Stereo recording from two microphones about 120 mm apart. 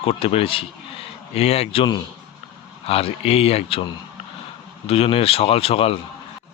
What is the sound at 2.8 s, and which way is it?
Speech, 55° left (ahead or behind).